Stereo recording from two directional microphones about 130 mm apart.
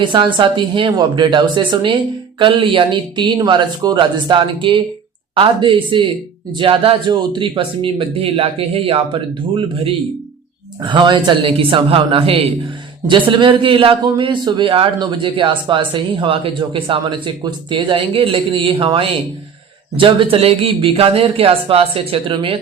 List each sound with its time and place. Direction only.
0.0 s a man's voice: 40° right (ahead or behind)